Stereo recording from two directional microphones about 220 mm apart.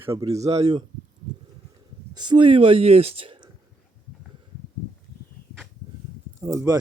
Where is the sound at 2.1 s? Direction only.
20° right (ahead or behind).